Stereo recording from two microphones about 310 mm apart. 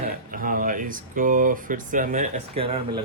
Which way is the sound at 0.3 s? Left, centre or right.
Right.